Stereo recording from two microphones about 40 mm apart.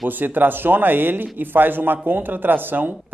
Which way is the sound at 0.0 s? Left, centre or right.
Right.